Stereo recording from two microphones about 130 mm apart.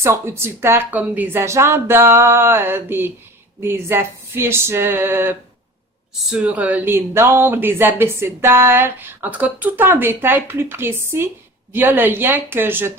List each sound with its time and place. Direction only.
0.0 s a woman's voice: 20° right (ahead or behind)